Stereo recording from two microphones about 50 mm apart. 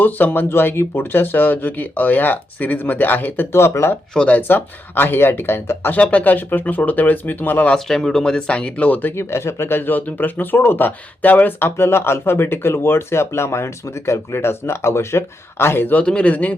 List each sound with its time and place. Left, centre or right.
0.0 s speech: left
3.5 s speech: left
4.3 s speech: left
6.0 s speech: left
7.9 s speech: centre
9.1 s speech: left
11.6 s speech: left
16.0 s speech: left